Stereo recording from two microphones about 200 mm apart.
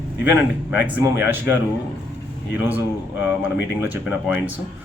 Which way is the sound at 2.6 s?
10° right (ahead or behind).